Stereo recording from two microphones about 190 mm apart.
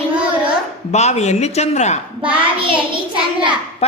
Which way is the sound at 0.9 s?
35° left (ahead or behind).